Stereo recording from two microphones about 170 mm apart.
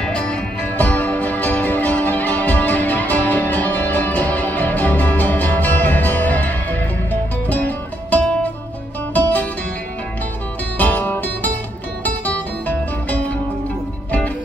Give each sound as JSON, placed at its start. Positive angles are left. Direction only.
{"t": 0.0, "sound": "music", "side_deg": 5}
{"t": 10.8, "sound": "music", "side_deg": 10}